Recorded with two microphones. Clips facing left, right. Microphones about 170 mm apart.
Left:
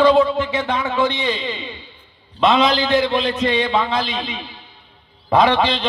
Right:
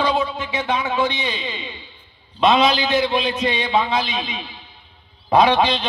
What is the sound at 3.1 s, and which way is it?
A man's voice, 15° right (ahead or behind).